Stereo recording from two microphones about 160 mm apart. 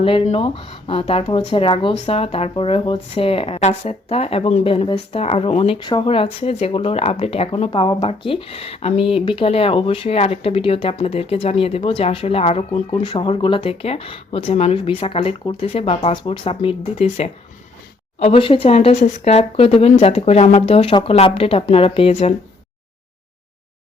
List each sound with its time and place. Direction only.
0.0 s speech: 35° left (ahead or behind)